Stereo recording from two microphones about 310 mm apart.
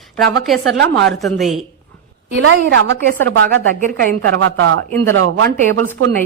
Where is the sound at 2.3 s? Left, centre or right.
Right.